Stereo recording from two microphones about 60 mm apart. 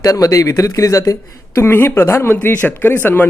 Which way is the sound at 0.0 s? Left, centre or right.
Left.